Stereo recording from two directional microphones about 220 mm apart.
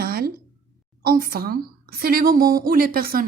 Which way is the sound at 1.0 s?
40° right (ahead or behind).